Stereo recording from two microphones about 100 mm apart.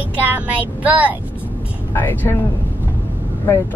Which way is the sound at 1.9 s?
20° left (ahead or behind).